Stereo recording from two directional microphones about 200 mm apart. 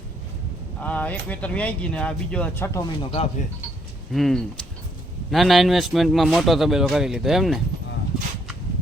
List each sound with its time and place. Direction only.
0.8 s speech: 5° left (ahead or behind)
3.0 s speech: 30° left (ahead or behind)
4.1 s a man's voice: centre (ahead or behind)